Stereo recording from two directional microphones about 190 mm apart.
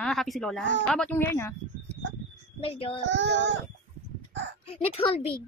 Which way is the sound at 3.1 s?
70° right (ahead or behind).